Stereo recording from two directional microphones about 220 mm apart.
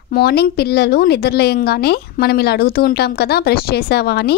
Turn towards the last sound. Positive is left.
turn(degrees=45)  # may be behind; listen again after turning